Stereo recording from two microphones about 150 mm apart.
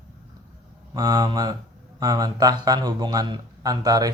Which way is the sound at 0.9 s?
25° right (ahead or behind).